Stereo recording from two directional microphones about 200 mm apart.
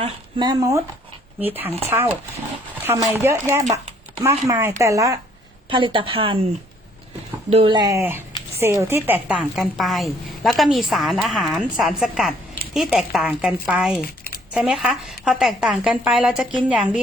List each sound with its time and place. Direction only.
0.0 s speech: 20° right (ahead or behind)
2.8 s speech: 15° right (ahead or behind)
3.6 s speech: 35° right (ahead or behind)
4.2 s a woman's voice: 15° right (ahead or behind)
7.5 s a woman's voice: 25° right (ahead or behind); by 17.0 s 5° right (ahead or behind)